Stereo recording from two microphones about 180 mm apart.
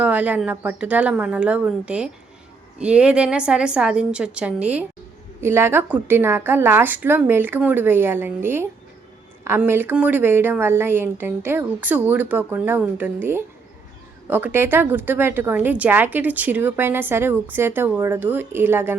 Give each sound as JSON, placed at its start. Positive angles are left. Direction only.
{"t": 0.0, "sound": "a woman's voice", "side_deg": -10}